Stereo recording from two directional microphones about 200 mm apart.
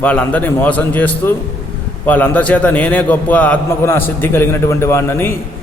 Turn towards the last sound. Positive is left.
turn(degrees=10)  # may be behind; listen again after turning